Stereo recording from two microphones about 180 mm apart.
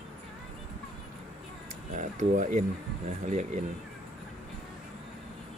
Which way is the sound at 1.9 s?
45° right (ahead or behind).